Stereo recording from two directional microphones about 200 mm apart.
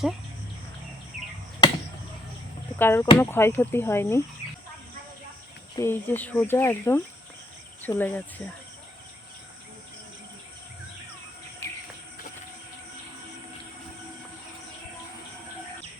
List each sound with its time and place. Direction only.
1.6 s chop: 20° left (ahead or behind)
2.7 s speech: 10° left (ahead or behind)
5.7 s speech: 10° left (ahead or behind)
11.6 s insect: 10° left (ahead or behind)